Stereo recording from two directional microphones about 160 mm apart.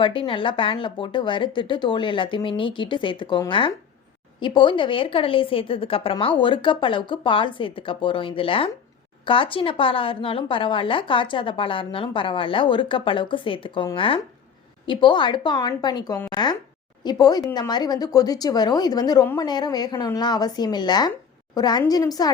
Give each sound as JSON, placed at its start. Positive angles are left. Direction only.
{"t": 0.0, "sound": "a woman's voice", "side_deg": 30}